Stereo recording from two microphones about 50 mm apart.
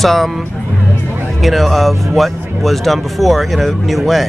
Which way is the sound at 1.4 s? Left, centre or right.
Centre.